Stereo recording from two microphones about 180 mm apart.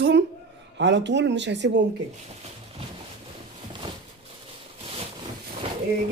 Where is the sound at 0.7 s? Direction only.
80° right.